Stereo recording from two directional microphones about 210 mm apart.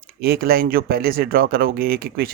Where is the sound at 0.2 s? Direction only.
45° right (ahead or behind).